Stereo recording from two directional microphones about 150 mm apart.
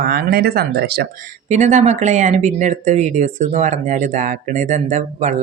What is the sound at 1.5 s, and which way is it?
Speech, 55° right (ahead or behind).